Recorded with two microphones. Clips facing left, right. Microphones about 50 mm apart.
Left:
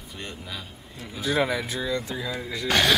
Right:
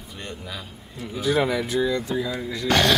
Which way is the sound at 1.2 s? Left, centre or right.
Centre.